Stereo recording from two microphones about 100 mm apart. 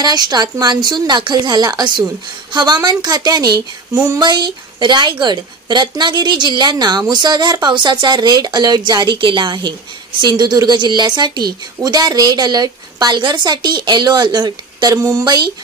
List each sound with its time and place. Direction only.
0.0 s a woman's voice: 45° right (ahead or behind)
4.3 s a woman's voice: 50° right (ahead or behind)